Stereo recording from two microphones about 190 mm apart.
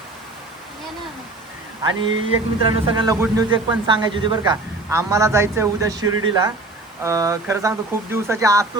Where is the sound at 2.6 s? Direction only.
25° right (ahead or behind).